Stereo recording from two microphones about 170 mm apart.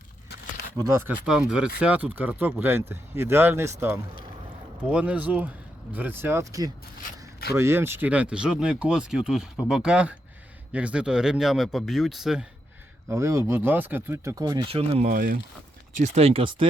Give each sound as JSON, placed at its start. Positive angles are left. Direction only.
{"t": 0.8, "sound": "speech", "side_deg": -15}
{"t": 13.1, "sound": "speech", "side_deg": -15}
{"t": 15.0, "sound": "speech", "side_deg": -55}
{"t": 16.0, "sound": "speech", "side_deg": -40}